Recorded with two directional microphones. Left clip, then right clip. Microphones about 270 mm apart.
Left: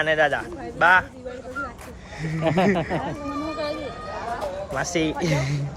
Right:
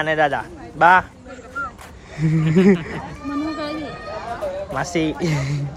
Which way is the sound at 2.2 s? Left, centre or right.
Centre.